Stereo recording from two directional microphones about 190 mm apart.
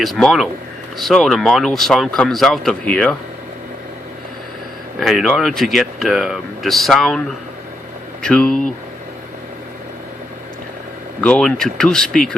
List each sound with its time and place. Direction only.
0.0 s speech: centre (ahead or behind)
4.9 s speech: centre (ahead or behind)
11.2 s speech: 5° left (ahead or behind)